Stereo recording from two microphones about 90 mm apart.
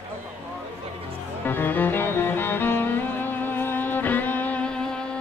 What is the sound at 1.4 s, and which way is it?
Music, 20° left (ahead or behind).